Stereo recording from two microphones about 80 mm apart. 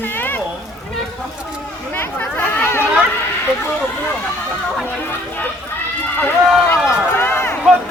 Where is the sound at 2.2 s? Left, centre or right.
Left.